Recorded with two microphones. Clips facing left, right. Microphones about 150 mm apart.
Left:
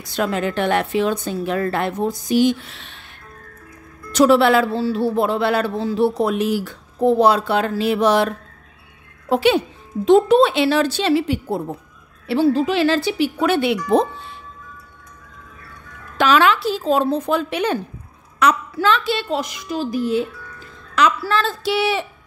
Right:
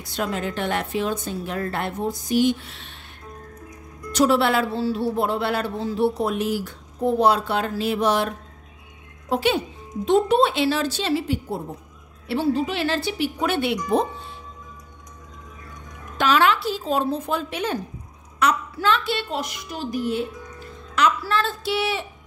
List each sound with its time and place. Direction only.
0.0 s speech: 90° left
4.1 s speech: 90° left
9.3 s a woman's voice: 80° left
10.0 s a woman's voice: 90° left
16.2 s a woman's voice: 90° left; by 17.7 s 75° left (ahead or behind)
18.4 s speech: 90° left
20.2 s music: 20° right (ahead or behind)
20.5 s speech: 90° left